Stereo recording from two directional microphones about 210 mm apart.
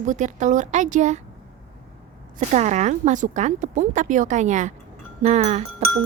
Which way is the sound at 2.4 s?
35° right (ahead or behind).